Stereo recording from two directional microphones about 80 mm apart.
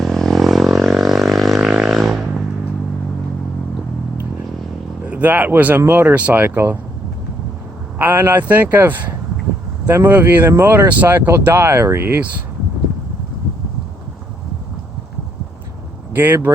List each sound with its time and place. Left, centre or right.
0.0 s vehicle: centre
1.8 s a sound: centre
5.0 s speech: centre
7.9 s speech: right
10.1 s speech: right
16.1 s speech: right